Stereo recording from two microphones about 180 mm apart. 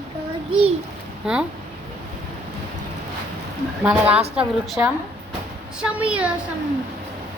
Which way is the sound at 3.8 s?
10° right (ahead or behind).